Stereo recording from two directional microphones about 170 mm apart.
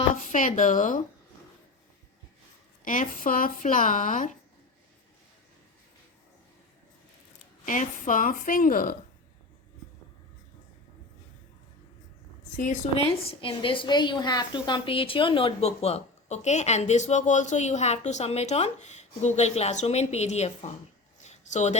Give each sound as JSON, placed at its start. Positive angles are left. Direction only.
{"t": 0.2, "sound": "speech", "side_deg": 50}
{"t": 2.8, "sound": "a woman's voice", "side_deg": 50}
{"t": 7.6, "sound": "a woman's voice", "side_deg": 50}
{"t": 13.2, "sound": "a woman's voice", "side_deg": 30}
{"t": 21.2, "sound": "a sound", "side_deg": 40}